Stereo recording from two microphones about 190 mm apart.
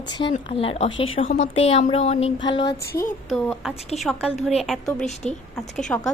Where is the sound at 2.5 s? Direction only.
20° left (ahead or behind).